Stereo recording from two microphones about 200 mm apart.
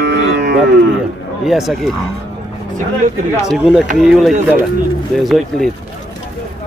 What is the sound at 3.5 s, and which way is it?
Speech, 5° right (ahead or behind).